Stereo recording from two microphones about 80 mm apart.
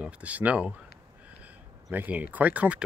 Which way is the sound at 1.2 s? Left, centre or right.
Right.